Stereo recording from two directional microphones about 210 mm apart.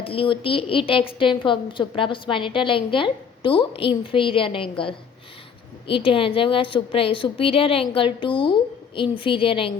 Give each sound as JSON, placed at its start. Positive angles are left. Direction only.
{"t": 0.0, "sound": "a woman's voice", "side_deg": 25}